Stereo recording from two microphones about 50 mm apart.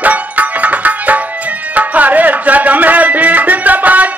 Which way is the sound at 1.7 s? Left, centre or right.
Right.